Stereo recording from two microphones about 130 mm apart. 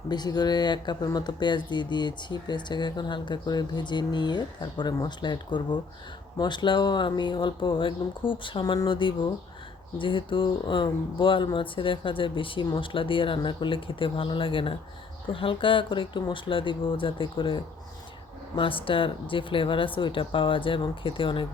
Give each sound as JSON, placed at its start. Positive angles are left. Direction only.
{"t": 0.1, "sound": "speech", "side_deg": 30}